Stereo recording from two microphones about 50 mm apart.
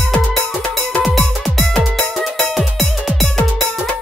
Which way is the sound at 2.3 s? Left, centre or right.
Centre.